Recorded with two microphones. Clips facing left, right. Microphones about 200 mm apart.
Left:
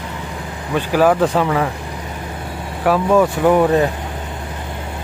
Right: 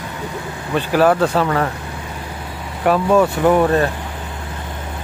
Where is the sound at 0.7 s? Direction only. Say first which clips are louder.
Even; 10° left (ahead or behind).